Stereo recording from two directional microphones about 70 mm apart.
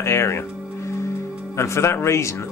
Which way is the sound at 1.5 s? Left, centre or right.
Left.